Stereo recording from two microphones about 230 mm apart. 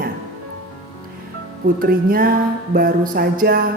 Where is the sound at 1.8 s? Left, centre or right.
Right.